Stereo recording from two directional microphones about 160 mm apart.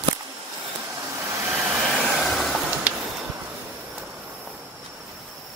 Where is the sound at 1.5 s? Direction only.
10° right (ahead or behind).